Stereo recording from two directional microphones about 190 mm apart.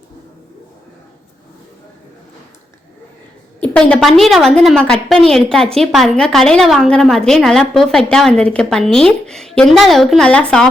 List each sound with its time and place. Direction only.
3.6 s a woman's voice: 5° left (ahead or behind)